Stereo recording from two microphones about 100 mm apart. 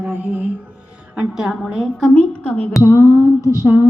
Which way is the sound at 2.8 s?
25° right (ahead or behind).